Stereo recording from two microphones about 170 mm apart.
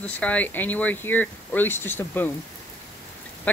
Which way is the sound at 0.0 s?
10° left (ahead or behind).